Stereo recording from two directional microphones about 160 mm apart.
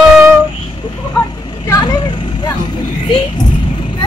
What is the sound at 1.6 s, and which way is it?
Vehicle, 20° left (ahead or behind).